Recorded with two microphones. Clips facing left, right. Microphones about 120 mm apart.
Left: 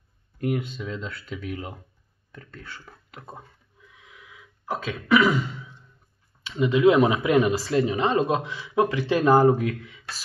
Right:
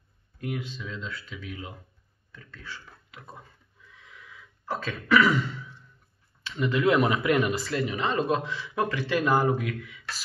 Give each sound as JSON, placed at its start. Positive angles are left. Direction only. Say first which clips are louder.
{"t": 0.4, "sound": "speech", "louder": "left 7 dB", "side_deg": 50}
{"t": 4.0, "sound": "throat clearing", "louder": "even", "side_deg": 15}
{"t": 6.4, "sound": "speech", "louder": "left 6 dB", "side_deg": 20}